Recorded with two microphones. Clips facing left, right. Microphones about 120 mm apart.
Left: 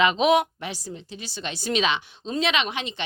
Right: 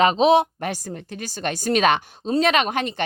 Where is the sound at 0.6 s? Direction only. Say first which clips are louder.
Right 6 dB; 50° right (ahead or behind).